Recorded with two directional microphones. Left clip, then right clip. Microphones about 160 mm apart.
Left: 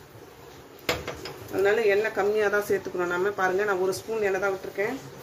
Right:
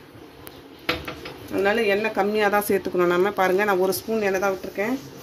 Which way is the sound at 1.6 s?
65° right (ahead or behind).